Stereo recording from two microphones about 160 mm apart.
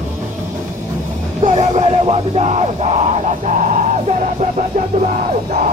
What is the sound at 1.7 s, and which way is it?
Music, 40° right (ahead or behind).